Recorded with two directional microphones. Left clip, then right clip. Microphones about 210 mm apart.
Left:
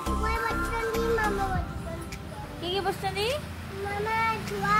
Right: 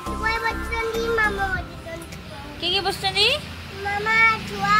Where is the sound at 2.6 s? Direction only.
20° right (ahead or behind).